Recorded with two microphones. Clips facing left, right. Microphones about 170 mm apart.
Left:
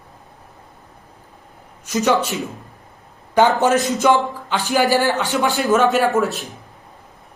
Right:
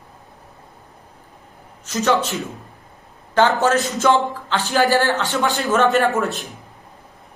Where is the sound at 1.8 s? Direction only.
15° left (ahead or behind).